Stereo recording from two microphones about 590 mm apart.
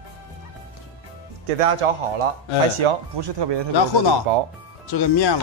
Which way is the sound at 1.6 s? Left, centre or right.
Right.